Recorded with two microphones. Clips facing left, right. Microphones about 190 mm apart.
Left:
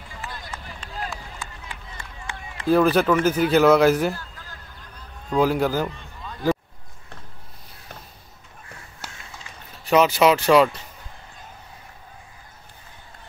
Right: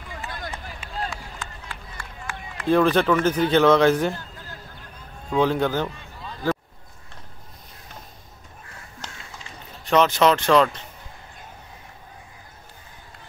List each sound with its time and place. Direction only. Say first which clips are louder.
0.8 s run: right 1 dB; 10° right (ahead or behind)
1.4 s run: even; 15° left (ahead or behind)
2.7 s speech: left 1 dB; 5° left (ahead or behind)
5.4 s speech: left 1 dB; 5° left (ahead or behind)
9.8 s speech: left 1 dB; 5° left (ahead or behind)